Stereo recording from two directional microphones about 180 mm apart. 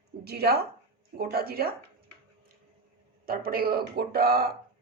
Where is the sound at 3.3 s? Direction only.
55° right (ahead or behind).